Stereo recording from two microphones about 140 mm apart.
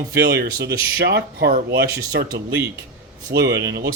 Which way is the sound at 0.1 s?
90° right.